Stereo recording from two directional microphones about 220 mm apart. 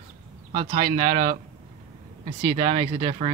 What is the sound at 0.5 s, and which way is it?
Speech, 30° right (ahead or behind).